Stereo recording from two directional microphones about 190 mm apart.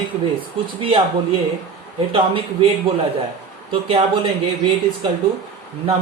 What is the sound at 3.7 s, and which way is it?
Speech, 30° right (ahead or behind).